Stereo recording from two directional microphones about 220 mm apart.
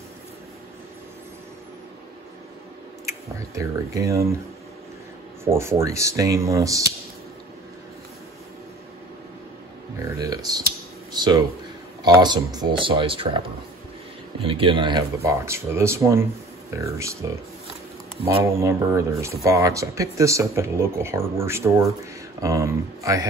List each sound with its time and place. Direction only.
3.3 s speech: 15° right (ahead or behind)
5.4 s speech: 10° right (ahead or behind)
9.9 s music: 15° right (ahead or behind)
12.0 s speech: 20° right (ahead or behind)
14.4 s speech: 25° right (ahead or behind)
18.4 s speech: 10° right (ahead or behind)